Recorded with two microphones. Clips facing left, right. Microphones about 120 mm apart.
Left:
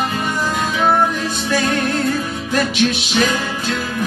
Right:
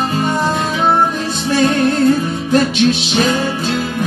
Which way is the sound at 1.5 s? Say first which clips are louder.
Right 6 dB; 30° right (ahead or behind).